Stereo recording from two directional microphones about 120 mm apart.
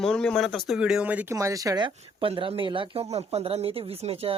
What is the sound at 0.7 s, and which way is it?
Speech, 5° right (ahead or behind).